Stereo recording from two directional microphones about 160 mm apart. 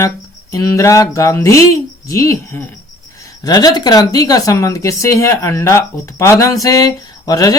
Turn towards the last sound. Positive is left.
turn(degrees=20)  # may be behind; listen again after turning